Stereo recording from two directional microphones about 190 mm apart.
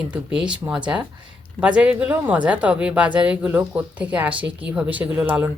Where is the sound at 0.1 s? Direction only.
5° right (ahead or behind).